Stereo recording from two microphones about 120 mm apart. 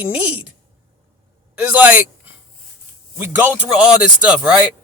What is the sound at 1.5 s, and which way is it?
Speech, 15° right (ahead or behind).